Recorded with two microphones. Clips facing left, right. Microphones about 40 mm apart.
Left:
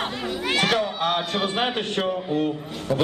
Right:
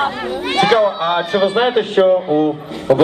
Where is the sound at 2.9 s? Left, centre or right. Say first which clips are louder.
Right 11 dB; right.